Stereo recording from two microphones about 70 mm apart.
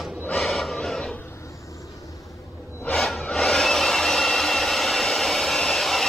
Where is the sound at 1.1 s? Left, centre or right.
Left.